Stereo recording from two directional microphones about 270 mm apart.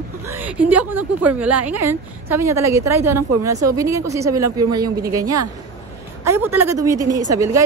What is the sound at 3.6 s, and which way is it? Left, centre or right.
A woman's voice, centre.